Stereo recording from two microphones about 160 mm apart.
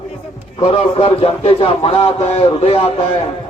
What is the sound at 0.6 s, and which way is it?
Speech, 35° left (ahead or behind).